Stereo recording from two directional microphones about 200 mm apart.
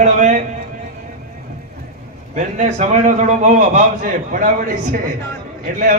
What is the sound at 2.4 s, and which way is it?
A man's voice, 35° right (ahead or behind).